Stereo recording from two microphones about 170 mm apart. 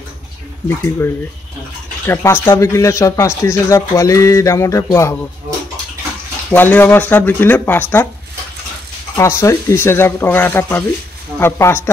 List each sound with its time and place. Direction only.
0.7 s speech: 15° left (ahead or behind)
6.5 s speech: 10° left (ahead or behind)
9.1 s speech: 15° left (ahead or behind)